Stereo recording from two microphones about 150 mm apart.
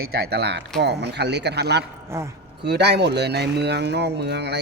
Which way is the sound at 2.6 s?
90° right.